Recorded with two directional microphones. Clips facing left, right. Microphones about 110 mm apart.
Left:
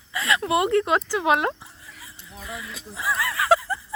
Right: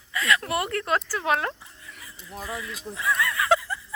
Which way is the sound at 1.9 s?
30° left (ahead or behind).